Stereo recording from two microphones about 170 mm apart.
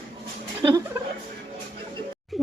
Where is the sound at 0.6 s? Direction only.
25° right (ahead or behind).